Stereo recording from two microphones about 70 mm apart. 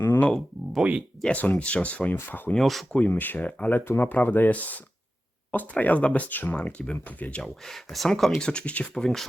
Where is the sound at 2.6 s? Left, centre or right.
Centre.